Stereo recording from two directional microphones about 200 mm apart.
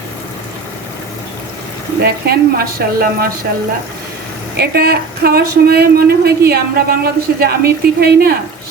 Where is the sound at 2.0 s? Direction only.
50° right (ahead or behind).